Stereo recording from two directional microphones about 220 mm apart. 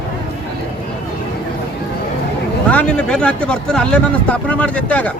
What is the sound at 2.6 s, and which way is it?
Speech, 5° left (ahead or behind).